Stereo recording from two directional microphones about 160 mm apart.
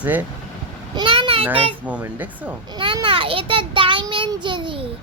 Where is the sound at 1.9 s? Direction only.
10° right (ahead or behind).